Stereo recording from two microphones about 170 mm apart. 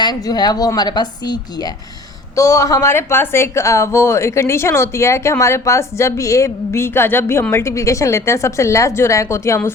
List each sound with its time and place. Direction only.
0.0 s a woman's voice: 25° left (ahead or behind)